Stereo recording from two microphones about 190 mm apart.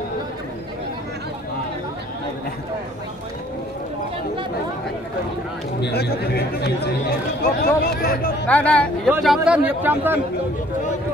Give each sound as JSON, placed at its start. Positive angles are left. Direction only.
{"t": 5.8, "sound": "speech", "side_deg": 60}
{"t": 8.5, "sound": "speech", "side_deg": 5}
{"t": 9.2, "sound": "speech", "side_deg": -5}